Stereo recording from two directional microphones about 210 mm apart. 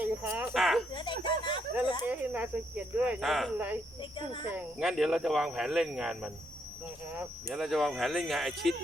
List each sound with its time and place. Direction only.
0.0 s speech: 10° right (ahead or behind)
0.9 s speech: 20° left (ahead or behind)
2.0 s speech: 5° right (ahead or behind)
7.5 s speech: centre (ahead or behind)